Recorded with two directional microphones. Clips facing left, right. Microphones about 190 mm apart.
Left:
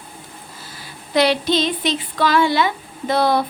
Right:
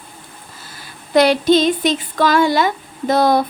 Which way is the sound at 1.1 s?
45° right (ahead or behind).